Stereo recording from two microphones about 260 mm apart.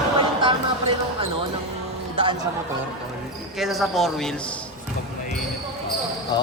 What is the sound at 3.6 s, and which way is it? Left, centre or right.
Speech, centre.